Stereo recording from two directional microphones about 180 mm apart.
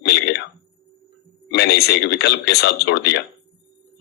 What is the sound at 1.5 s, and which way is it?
Speech, 65° left (ahead or behind).